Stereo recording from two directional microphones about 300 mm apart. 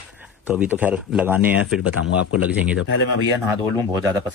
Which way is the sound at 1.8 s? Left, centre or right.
Left.